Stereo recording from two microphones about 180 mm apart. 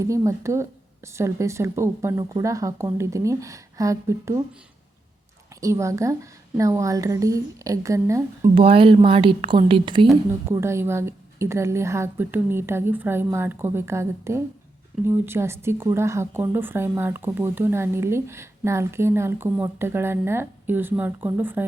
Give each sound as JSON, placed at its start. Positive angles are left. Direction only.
{"t": 0.0, "sound": "speech", "side_deg": -15}
{"t": 5.5, "sound": "speech", "side_deg": -15}
{"t": 8.4, "sound": "speech", "side_deg": -30}
{"t": 10.5, "sound": "speech", "side_deg": -15}